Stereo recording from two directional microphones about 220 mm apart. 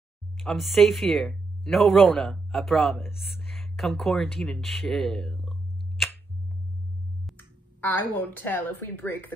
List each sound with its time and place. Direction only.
0.4 s speech: centre (ahead or behind)
7.2 s a woman's voice: 10° left (ahead or behind)